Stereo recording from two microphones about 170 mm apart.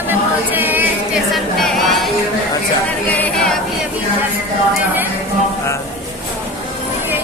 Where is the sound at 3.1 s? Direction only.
10° left (ahead or behind).